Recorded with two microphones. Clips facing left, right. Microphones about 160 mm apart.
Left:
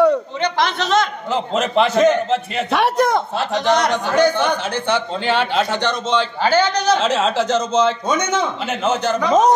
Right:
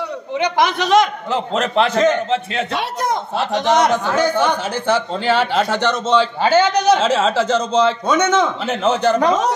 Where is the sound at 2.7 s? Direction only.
60° left (ahead or behind).